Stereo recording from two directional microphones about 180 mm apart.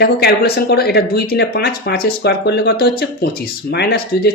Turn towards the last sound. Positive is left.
turn(degrees=60)  # may be behind; listen again after turning